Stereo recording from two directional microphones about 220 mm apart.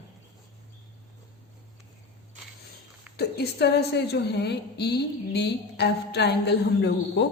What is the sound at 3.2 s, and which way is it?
A woman's voice, 45° left (ahead or behind).